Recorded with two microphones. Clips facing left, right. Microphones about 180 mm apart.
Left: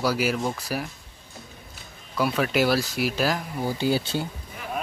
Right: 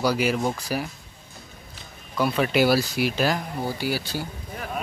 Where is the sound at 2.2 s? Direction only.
5° left (ahead or behind).